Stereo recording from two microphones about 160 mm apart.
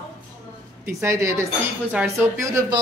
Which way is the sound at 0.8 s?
20° right (ahead or behind).